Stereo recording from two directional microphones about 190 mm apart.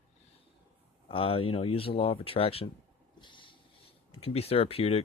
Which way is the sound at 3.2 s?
25° left (ahead or behind).